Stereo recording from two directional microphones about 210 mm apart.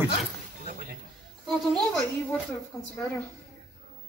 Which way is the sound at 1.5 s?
Centre (ahead or behind).